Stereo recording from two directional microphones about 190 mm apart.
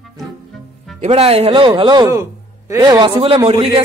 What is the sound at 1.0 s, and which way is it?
A man's voice, 30° right (ahead or behind).